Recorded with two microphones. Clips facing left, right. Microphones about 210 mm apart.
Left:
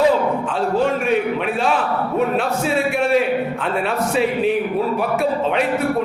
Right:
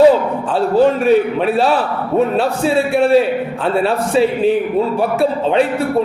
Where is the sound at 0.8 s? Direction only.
35° right (ahead or behind).